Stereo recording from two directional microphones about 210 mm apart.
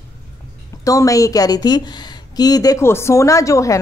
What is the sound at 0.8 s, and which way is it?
A woman's voice, 15° left (ahead or behind).